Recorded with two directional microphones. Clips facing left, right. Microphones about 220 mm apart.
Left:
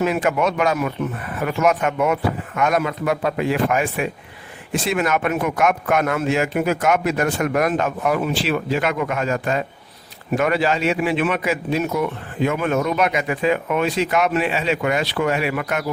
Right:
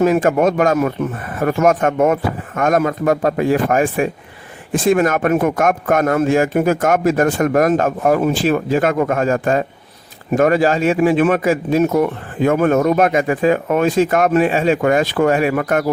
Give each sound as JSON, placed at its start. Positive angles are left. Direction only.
{"t": 0.0, "sound": "a man's voice", "side_deg": -45}